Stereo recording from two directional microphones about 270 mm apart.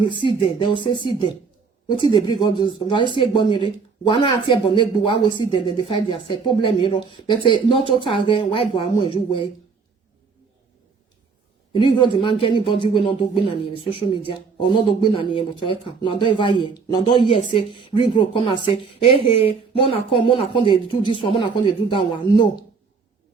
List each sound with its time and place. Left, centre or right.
0.0 s speech: centre
11.7 s speech: centre